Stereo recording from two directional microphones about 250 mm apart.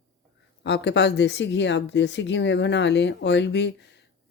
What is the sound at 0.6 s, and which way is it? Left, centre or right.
Speech, left.